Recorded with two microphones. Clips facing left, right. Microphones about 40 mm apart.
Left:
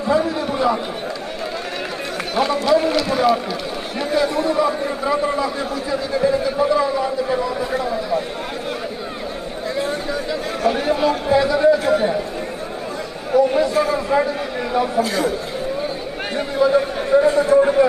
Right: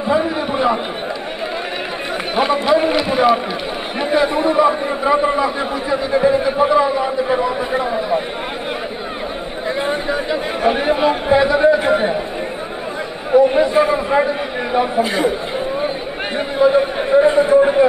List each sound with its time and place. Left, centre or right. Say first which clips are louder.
0.1 s chatter: right 1 dB; right
2.3 s a man's voice: right 2 dB; right
9.8 s a man's voice: right 3 dB; right
13.3 s a man's voice: right 4 dB; right
16.3 s a man's voice: right 3 dB; right